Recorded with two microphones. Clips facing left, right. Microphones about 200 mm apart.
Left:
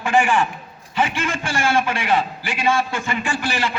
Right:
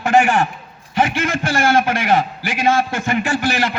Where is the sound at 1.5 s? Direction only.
40° right (ahead or behind).